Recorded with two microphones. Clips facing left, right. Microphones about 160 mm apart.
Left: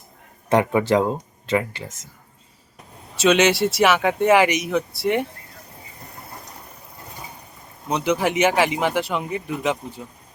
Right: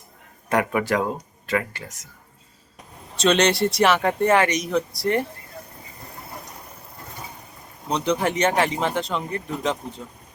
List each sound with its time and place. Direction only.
0.5 s speech: 25° left (ahead or behind)
3.2 s speech: 5° left (ahead or behind)
7.9 s speech: 5° left (ahead or behind)